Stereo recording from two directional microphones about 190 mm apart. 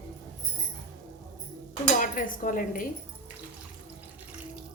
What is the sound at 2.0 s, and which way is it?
Speech, 45° left (ahead or behind).